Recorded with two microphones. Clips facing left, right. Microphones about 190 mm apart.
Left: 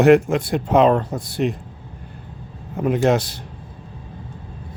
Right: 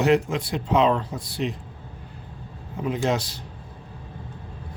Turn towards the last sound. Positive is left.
turn(degrees=55)  # may be behind; listen again after turning